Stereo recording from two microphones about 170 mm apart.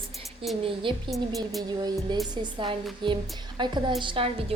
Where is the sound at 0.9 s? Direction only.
30° right (ahead or behind).